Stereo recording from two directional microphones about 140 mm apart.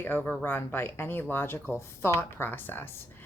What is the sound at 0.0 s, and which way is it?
Speech, 15° left (ahead or behind).